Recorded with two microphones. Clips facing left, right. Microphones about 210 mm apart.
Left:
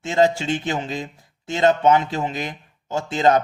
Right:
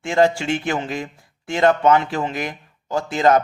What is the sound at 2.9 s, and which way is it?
Speech, 25° left (ahead or behind).